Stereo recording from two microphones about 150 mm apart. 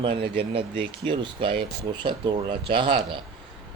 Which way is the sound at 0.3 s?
35° right (ahead or behind).